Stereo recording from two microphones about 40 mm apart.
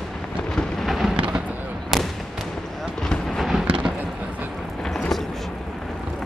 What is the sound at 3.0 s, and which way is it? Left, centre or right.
Artillery fire, centre.